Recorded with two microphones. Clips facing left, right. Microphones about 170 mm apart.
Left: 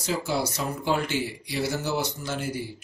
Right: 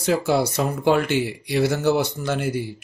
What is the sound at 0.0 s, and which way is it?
Speech, 60° right (ahead or behind).